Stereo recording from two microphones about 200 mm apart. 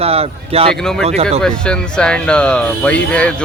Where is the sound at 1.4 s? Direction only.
5° left (ahead or behind).